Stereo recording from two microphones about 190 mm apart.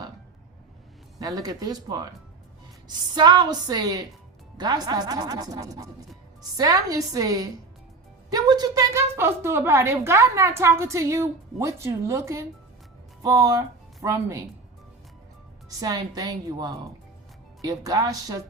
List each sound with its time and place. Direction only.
1.2 s a woman's voice: 20° right (ahead or behind)
15.8 s a woman's voice: 20° right (ahead or behind)